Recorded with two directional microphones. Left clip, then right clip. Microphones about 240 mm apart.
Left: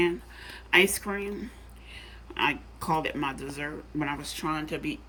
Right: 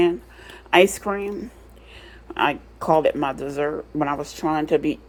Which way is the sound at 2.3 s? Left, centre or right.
Centre.